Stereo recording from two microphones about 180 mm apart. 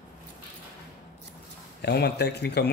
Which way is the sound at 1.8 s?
65° left (ahead or behind).